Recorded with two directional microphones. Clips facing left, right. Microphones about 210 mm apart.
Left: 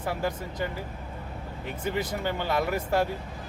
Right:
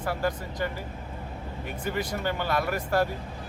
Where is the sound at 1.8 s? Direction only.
20° left (ahead or behind).